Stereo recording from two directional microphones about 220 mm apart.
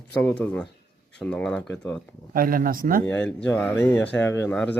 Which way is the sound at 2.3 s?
40° right (ahead or behind).